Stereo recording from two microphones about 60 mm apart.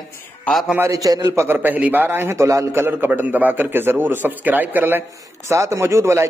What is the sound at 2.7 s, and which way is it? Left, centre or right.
A man's voice, right.